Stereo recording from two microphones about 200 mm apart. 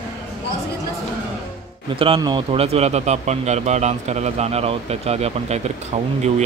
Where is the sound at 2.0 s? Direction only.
25° right (ahead or behind).